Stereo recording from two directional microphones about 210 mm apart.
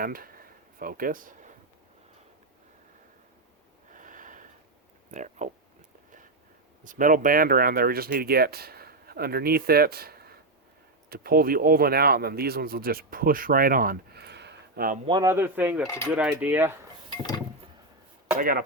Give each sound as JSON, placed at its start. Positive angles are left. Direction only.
{"t": 0.0, "sound": "a sound", "side_deg": -45}
{"t": 3.9, "sound": "a sound", "side_deg": -40}
{"t": 5.1, "sound": "speech", "side_deg": -35}
{"t": 6.8, "sound": "speech", "side_deg": -40}
{"t": 15.0, "sound": "speech", "side_deg": -20}
{"t": 18.3, "sound": "speech", "side_deg": -45}